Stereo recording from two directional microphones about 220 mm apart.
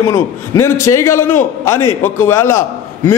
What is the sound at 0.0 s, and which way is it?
A man's voice, 10° left (ahead or behind).